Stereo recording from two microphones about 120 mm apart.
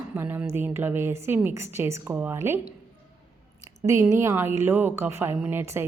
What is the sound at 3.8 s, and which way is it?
A woman's voice, 25° right (ahead or behind).